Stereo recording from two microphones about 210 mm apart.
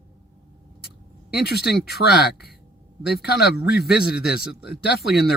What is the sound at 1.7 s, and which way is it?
Speech, 50° left (ahead or behind).